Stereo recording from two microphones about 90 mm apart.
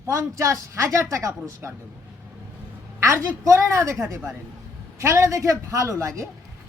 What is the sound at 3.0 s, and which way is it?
A man's voice, 35° right (ahead or behind).